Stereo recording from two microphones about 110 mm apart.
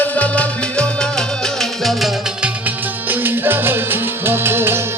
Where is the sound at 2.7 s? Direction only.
15° right (ahead or behind).